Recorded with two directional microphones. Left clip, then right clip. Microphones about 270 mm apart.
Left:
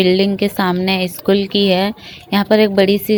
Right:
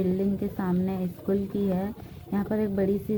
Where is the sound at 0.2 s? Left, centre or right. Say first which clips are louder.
Left 14 dB; left.